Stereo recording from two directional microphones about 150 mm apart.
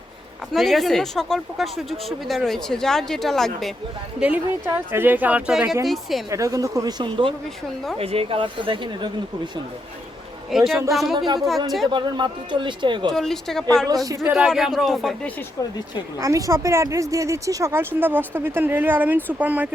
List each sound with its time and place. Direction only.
0.5 s speech: centre (ahead or behind)
4.2 s speech: 10° right (ahead or behind)
6.3 s speech: 20° right (ahead or behind)
10.5 s speech: centre (ahead or behind)
11.9 s speech: 30° right (ahead or behind)
13.1 s speech: 5° left (ahead or behind)
13.8 s speech: 25° right (ahead or behind)
14.3 s speech: 5° right (ahead or behind)
16.2 s speech: 20° right (ahead or behind)